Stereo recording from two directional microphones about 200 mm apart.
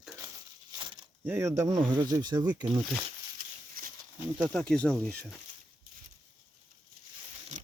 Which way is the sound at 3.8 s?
45° right (ahead or behind).